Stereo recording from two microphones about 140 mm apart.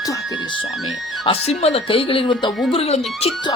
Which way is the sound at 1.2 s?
45° left (ahead or behind).